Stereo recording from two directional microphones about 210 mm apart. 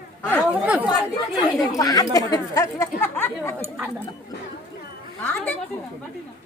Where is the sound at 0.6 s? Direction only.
5° right (ahead or behind).